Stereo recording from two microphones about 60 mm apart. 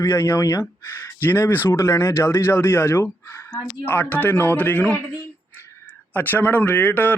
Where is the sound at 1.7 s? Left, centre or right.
Left.